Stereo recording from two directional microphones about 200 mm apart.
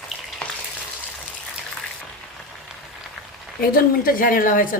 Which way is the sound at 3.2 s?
Centre (ahead or behind).